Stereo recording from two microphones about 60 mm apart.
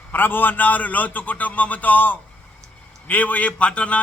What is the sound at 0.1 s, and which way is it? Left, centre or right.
A man's voice, left.